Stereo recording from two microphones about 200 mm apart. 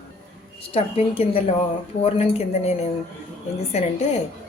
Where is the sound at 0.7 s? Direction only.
30° left (ahead or behind).